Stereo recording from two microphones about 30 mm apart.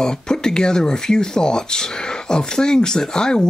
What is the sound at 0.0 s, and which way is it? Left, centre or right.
Speech, left.